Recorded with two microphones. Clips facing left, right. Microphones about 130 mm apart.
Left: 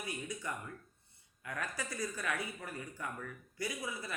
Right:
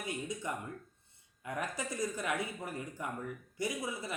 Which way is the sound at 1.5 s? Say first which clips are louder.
Right 3 dB; 20° right (ahead or behind).